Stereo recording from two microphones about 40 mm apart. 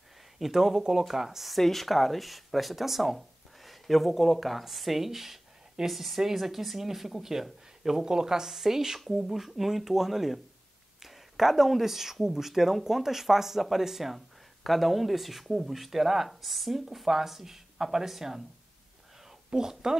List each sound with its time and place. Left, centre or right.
0.4 s speech: centre
19.5 s speech: centre